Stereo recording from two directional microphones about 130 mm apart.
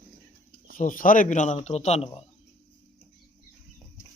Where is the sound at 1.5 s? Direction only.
60° left (ahead or behind).